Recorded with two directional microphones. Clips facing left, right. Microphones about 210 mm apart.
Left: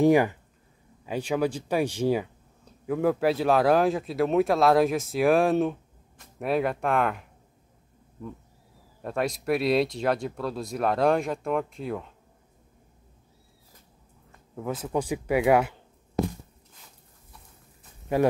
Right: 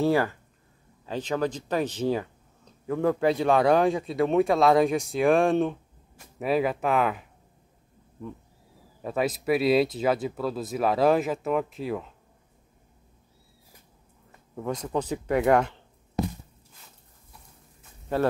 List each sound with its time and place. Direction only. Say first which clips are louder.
0.0 s speech: left 4 dB; 15° left (ahead or behind); by 7.2 s centre (ahead or behind)
9.0 s speech: right 1 dB; centre (ahead or behind)
14.5 s speech: even; 5° left (ahead or behind)
18.1 s speech: left 2 dB; 10° left (ahead or behind)